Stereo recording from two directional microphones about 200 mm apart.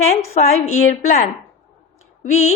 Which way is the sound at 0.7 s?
40° left (ahead or behind).